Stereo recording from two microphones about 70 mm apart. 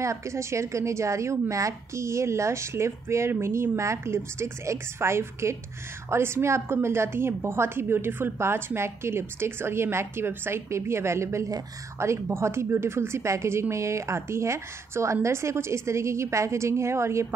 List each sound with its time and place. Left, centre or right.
0.0 s a woman's voice: right